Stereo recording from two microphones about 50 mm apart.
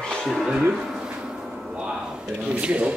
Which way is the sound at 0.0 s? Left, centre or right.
Centre.